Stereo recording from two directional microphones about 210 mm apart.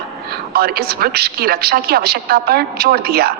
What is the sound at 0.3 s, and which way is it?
A woman's voice, 50° right (ahead or behind).